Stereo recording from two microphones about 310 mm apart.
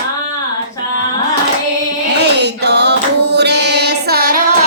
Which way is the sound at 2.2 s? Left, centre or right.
Right.